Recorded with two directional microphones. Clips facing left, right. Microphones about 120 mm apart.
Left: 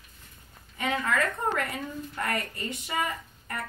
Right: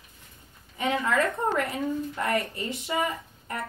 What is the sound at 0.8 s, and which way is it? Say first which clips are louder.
A woman's voice: right 3 dB; 25° right (ahead or behind).